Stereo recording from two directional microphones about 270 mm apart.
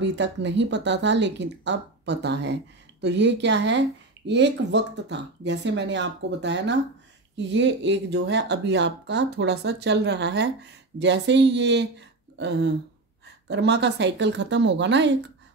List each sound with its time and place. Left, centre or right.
0.0 s speech: right